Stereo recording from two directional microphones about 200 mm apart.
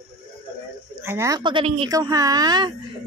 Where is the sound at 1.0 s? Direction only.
15° right (ahead or behind).